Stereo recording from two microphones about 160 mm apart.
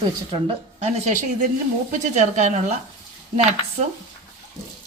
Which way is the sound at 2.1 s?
50° right (ahead or behind).